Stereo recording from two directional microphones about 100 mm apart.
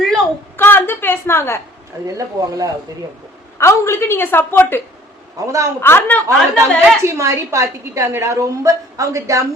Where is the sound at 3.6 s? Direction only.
25° left (ahead or behind).